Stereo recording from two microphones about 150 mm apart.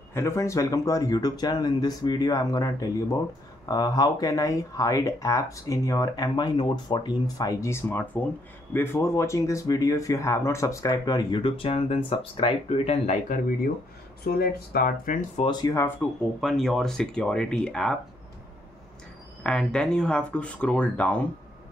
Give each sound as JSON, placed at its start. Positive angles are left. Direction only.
{"t": 0.1, "sound": "speech", "side_deg": 20}
{"t": 14.2, "sound": "speech", "side_deg": 85}
{"t": 15.4, "sound": "speech", "side_deg": 25}
{"t": 16.3, "sound": "speech", "side_deg": 0}
{"t": 19.4, "sound": "speech", "side_deg": 5}